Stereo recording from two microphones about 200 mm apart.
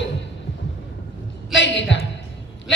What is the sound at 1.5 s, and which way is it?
Speech, 65° left (ahead or behind).